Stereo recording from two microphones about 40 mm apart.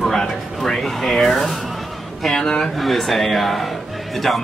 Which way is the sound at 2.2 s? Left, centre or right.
Centre.